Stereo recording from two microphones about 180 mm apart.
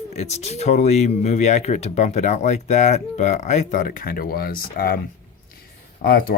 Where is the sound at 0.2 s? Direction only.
35° left (ahead or behind); by 4.9 s 55° left (ahead or behind).